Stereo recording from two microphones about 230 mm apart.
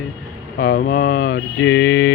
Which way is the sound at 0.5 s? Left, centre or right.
Left.